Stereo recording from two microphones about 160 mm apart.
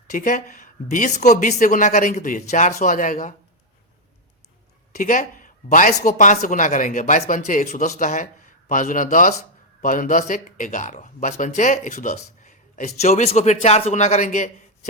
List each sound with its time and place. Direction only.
0.1 s speech: 50° left (ahead or behind)
4.9 s speech: 55° left (ahead or behind)